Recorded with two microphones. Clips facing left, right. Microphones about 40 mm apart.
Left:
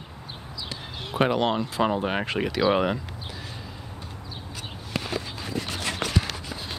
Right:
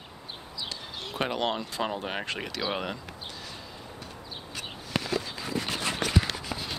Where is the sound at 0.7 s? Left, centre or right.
Centre.